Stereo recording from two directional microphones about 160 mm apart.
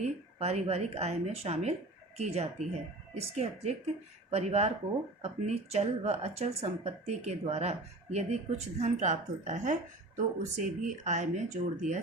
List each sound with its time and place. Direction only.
0.0 s speech: 45° right (ahead or behind)